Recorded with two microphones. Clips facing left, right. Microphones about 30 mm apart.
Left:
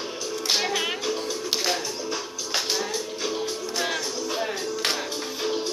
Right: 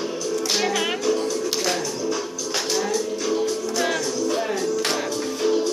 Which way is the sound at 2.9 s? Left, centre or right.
Left.